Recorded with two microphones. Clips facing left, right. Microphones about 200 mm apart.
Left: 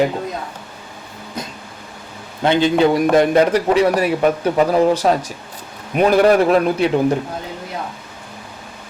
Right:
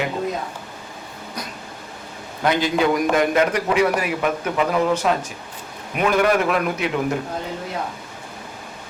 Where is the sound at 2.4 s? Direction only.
25° left (ahead or behind).